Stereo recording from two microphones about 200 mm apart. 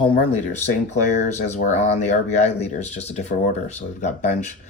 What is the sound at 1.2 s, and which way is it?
Speech, 35° left (ahead or behind).